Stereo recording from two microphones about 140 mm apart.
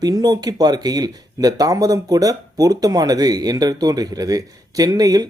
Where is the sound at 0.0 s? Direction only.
30° right (ahead or behind).